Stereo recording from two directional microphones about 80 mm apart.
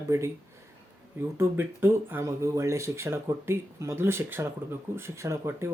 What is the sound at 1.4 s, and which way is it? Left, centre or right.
Speech, right.